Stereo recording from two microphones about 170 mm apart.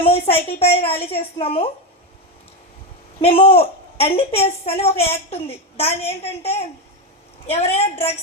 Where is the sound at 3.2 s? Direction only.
35° left (ahead or behind).